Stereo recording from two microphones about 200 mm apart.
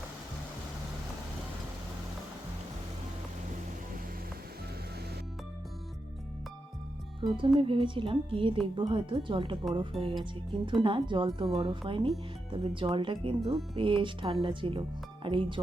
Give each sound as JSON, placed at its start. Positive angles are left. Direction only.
{"t": 7.3, "sound": "a woman's voice", "side_deg": -25}
{"t": 9.9, "sound": "music", "side_deg": 0}
{"t": 10.5, "sound": "a woman's voice", "side_deg": -25}